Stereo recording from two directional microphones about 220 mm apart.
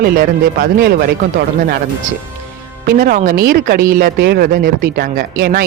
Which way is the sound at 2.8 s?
40° right (ahead or behind).